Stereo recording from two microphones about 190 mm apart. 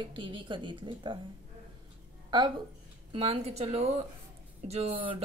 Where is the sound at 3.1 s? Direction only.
35° right (ahead or behind).